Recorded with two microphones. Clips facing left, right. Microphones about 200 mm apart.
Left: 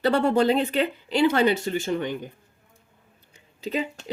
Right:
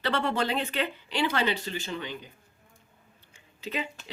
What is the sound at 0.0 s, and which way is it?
Speech, 40° left (ahead or behind).